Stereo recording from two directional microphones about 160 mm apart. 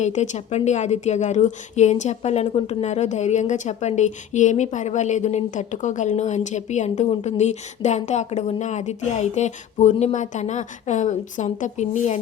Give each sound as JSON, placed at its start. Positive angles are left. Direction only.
{"t": 0.0, "sound": "a woman's voice", "side_deg": 45}